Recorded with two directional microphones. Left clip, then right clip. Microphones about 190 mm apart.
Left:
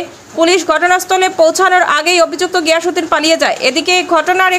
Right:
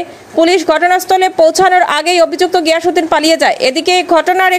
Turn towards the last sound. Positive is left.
turn(degrees=-25)  # may be behind; listen again after turning